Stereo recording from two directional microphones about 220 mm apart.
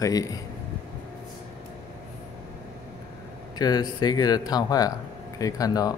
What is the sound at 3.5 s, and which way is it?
Speech, 20° left (ahead or behind).